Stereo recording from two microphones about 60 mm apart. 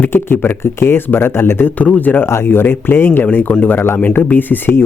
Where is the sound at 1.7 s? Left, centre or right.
Left.